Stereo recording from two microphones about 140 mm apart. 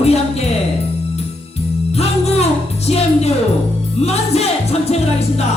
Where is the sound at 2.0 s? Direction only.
50° left (ahead or behind).